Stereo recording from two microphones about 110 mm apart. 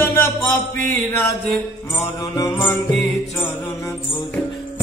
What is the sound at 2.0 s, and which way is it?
Mantra, 30° left (ahead or behind).